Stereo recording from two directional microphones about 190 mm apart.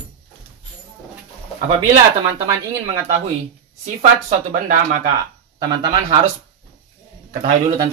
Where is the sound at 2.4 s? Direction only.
15° right (ahead or behind).